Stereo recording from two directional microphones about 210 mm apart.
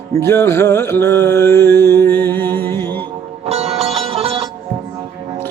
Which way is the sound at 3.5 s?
30° right (ahead or behind).